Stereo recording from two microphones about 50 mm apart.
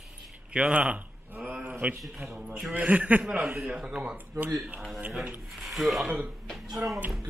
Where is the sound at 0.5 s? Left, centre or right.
Right.